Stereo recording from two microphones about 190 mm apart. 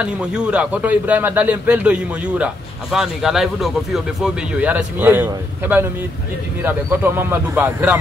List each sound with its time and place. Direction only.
0.0 s a man's voice: 5° right (ahead or behind)